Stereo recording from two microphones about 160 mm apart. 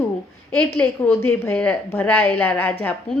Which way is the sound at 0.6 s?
10° left (ahead or behind).